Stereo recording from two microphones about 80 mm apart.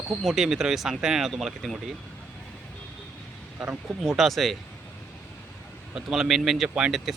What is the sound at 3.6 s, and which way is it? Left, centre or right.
Speech, centre.